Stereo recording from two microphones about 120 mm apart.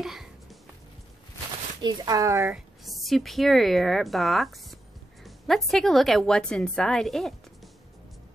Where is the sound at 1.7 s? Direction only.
35° right (ahead or behind).